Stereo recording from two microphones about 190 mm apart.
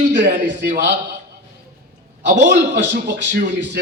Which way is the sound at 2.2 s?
65° right (ahead or behind).